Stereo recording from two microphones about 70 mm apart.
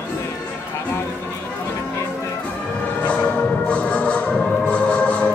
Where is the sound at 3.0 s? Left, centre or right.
Centre.